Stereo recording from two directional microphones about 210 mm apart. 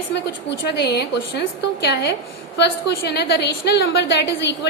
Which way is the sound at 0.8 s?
55° left (ahead or behind).